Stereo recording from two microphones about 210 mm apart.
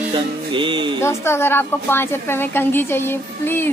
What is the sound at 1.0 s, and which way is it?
A woman's voice, 10° left (ahead or behind).